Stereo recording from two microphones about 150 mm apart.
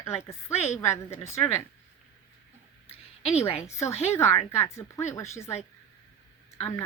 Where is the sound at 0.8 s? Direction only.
20° left (ahead or behind).